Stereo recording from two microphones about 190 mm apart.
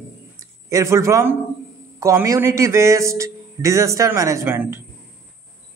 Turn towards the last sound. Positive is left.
turn(degrees=-15)  # may be behind; listen again after turning